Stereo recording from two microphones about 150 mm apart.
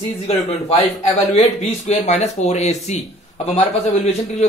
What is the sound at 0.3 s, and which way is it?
Speech, 45° left (ahead or behind).